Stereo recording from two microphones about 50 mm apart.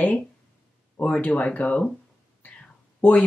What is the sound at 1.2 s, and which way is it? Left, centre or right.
Speech, left.